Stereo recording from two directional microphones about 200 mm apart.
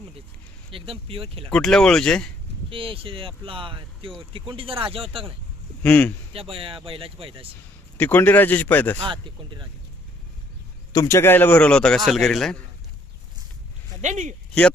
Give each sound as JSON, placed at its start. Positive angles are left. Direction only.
{"t": 0.7, "sound": "speech", "side_deg": -25}
{"t": 1.5, "sound": "a man's voice", "side_deg": 5}
{"t": 2.6, "sound": "speech", "side_deg": -25}
{"t": 5.8, "sound": "speech", "side_deg": 5}
{"t": 6.3, "sound": "speech", "side_deg": -30}
{"t": 7.9, "sound": "speech", "side_deg": 10}
{"t": 9.0, "sound": "speech", "side_deg": -25}
{"t": 10.9, "sound": "a man's voice", "side_deg": 15}
{"t": 14.0, "sound": "speech", "side_deg": -35}